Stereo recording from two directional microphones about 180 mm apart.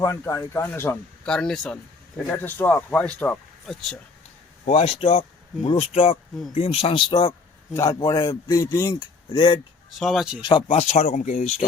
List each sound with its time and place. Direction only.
0.0 s speech: 15° left (ahead or behind); by 3.9 s centre (ahead or behind)
4.6 s a man's voice: 35° left (ahead or behind)
10.0 s speech: centre (ahead or behind)
10.4 s speech: 30° left (ahead or behind)